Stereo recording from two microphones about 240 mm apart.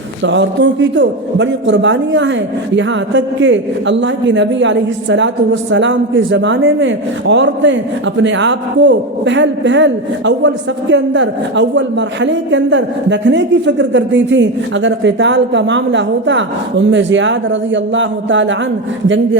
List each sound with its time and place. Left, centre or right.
0.3 s speech: right